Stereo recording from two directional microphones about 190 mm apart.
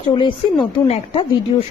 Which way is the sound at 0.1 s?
25° left (ahead or behind).